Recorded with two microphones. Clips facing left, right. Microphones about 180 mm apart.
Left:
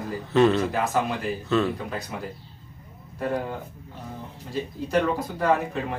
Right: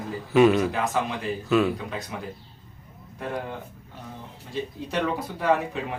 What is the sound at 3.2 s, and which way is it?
Speech, 5° left (ahead or behind).